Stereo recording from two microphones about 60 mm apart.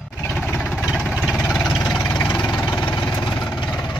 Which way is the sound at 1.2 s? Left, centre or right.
Centre.